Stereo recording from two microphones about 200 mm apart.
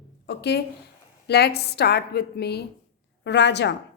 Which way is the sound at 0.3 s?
55° left (ahead or behind).